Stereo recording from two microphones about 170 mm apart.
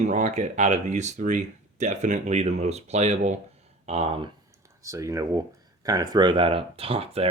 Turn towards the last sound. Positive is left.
turn(degrees=-35)  # may be behind; listen again after turning